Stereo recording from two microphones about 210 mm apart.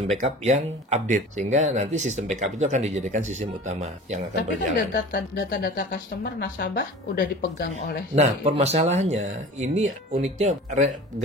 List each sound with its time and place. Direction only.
0.1 s speech: 30° right (ahead or behind)
4.4 s speech: 50° left (ahead or behind)
8.2 s speech: 30° right (ahead or behind)